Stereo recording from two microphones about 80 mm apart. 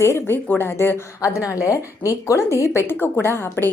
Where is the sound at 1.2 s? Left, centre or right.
Left.